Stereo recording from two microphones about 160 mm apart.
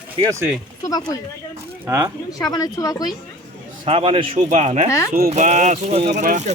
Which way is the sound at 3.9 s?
35° right (ahead or behind).